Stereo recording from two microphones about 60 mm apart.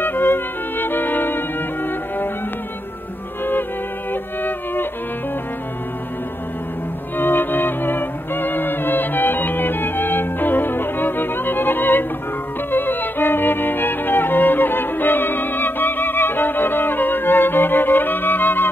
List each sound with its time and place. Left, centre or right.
0.0 s music: left
4.1 s music: left
7.2 s music: left
12.7 s violin: left